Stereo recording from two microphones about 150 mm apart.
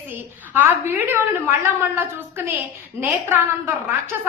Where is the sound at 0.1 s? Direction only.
15° right (ahead or behind).